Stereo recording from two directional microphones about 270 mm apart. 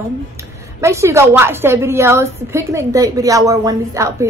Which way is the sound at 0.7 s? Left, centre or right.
Centre.